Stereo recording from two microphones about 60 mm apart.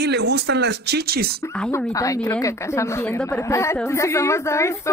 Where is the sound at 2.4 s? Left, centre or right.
Left.